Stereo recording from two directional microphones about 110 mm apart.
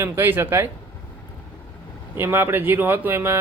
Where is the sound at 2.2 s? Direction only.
20° right (ahead or behind).